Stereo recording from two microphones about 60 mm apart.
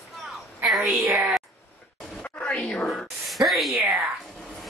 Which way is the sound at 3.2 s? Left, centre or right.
Centre.